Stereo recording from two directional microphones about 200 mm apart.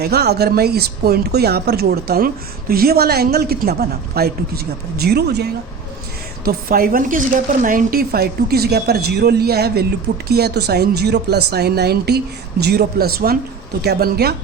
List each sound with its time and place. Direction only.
0.0 s speech: 55° right (ahead or behind)